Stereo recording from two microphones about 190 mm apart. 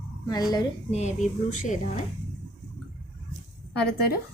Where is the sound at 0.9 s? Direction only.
35° left (ahead or behind).